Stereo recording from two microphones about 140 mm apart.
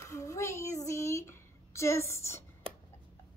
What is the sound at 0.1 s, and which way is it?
Child singing, 20° left (ahead or behind).